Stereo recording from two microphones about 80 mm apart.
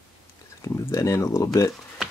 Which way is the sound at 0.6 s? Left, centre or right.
Left.